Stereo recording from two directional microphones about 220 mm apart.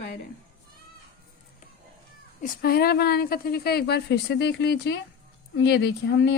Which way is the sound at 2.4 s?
45° left (ahead or behind).